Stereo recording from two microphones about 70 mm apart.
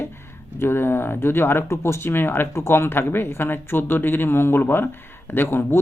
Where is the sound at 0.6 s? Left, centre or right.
Left.